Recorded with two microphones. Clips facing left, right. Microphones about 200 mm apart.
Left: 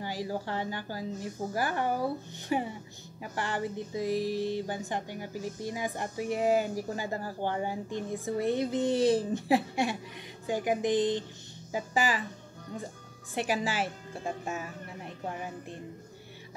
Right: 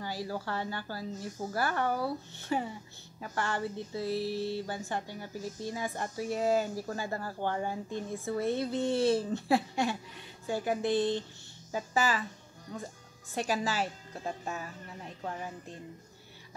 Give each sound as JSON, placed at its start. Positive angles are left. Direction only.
{"t": 0.0, "sound": "music", "side_deg": 15}
{"t": 13.3, "sound": "music", "side_deg": 15}